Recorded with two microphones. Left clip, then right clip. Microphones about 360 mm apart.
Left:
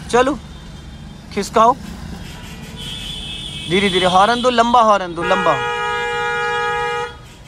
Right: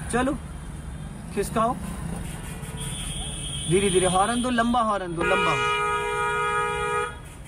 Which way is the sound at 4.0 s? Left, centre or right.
Centre.